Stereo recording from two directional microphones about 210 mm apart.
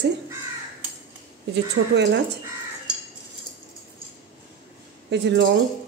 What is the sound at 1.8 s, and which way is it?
Speech, 65° right (ahead or behind).